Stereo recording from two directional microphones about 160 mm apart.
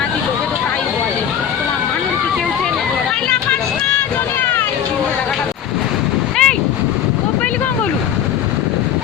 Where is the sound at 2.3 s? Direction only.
Centre (ahead or behind).